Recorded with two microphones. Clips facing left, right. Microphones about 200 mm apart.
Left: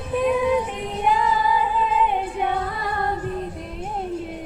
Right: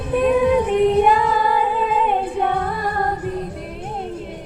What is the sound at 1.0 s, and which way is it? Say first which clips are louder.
Female singing: right 3 dB; 65° right (ahead or behind).